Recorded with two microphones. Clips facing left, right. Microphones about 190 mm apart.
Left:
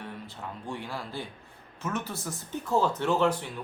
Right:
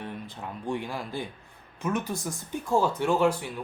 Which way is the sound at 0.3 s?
15° right (ahead or behind).